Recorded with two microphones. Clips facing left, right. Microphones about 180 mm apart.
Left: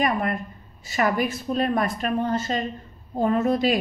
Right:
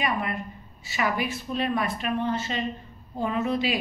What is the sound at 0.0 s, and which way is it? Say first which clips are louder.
A woman's voice: left 4 dB; 45° left (ahead or behind).